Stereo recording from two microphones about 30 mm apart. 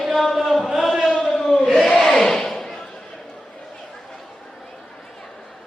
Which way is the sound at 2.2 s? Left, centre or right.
Centre.